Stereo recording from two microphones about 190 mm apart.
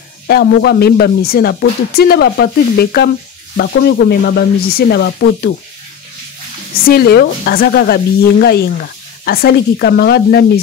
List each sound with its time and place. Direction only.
0.3 s speech: 55° left (ahead or behind)
6.9 s speech: 55° left (ahead or behind)